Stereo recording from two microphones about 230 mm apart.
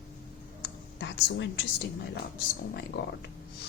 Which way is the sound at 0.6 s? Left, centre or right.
Left.